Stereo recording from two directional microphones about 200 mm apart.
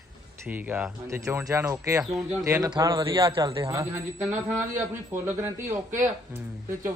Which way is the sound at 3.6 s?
15° right (ahead or behind).